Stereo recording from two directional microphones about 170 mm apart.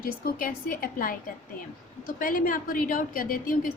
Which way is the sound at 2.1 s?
55° left (ahead or behind).